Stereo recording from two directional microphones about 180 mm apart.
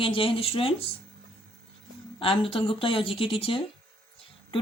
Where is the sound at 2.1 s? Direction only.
30° left (ahead or behind).